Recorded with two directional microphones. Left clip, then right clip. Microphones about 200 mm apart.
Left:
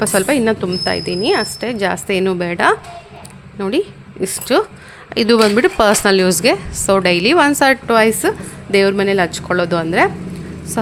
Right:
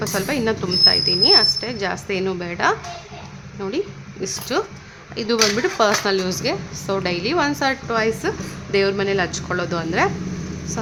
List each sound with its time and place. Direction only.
0.0 s speech: 40° left (ahead or behind)